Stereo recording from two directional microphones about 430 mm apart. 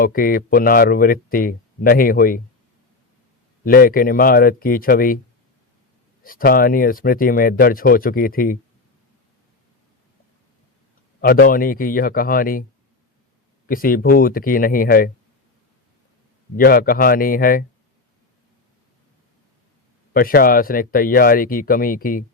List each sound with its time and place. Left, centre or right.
0.0 s speech: centre
3.6 s speech: centre
6.2 s speech: centre
11.2 s speech: centre
13.7 s speech: centre
16.6 s speech: centre
20.1 s speech: centre